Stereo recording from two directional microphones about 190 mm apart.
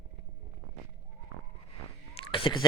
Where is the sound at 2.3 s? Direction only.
25° left (ahead or behind).